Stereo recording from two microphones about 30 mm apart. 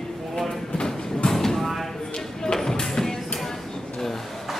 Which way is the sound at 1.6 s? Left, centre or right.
Centre.